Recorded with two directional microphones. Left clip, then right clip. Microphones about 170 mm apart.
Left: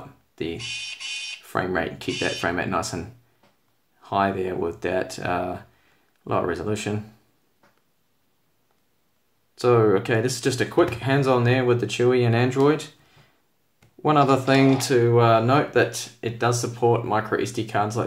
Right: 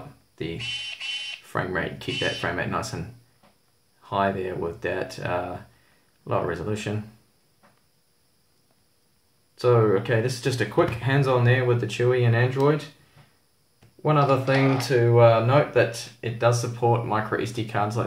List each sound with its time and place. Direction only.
1.5 s speech: 30° left (ahead or behind)
4.0 s speech: 35° left (ahead or behind)
9.6 s speech: 35° left (ahead or behind)
14.0 s speech: 45° left (ahead or behind)
16.7 s speech: 25° left (ahead or behind)